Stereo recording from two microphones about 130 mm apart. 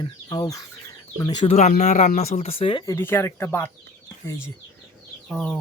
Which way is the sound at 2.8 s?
20° left (ahead or behind).